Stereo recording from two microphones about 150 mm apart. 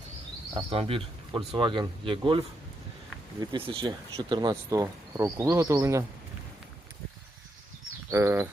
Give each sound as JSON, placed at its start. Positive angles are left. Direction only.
{"t": 0.5, "sound": "speech", "side_deg": -40}
{"t": 3.4, "sound": "speech", "side_deg": -35}
{"t": 8.1, "sound": "speech", "side_deg": -15}